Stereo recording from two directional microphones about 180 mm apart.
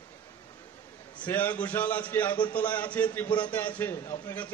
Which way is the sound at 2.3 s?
25° left (ahead or behind).